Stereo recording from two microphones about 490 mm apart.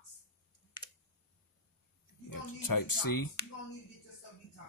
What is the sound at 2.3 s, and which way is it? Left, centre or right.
Music, left.